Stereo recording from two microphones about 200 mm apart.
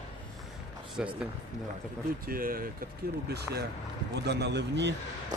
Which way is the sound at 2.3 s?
45° right (ahead or behind).